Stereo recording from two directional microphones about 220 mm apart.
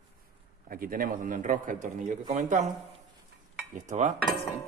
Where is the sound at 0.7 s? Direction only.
40° right (ahead or behind).